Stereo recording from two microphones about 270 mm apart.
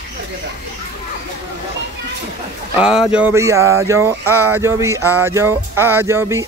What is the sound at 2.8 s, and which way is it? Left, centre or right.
Speech, centre.